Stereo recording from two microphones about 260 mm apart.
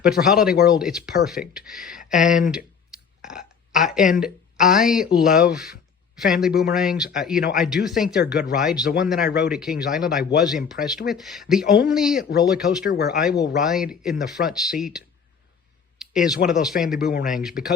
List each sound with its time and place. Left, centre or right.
0.0 s speech: centre
3.2 s burping: centre
4.2 s speech: centre
12.8 s speech: left
13.6 s speech: centre
16.0 s a sound: centre
16.5 s speech: centre